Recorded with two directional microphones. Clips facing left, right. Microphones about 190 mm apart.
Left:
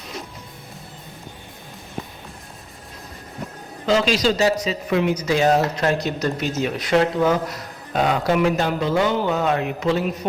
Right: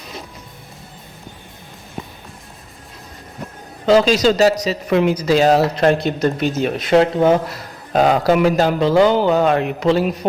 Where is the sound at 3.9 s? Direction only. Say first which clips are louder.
Right 6 dB; 35° right (ahead or behind).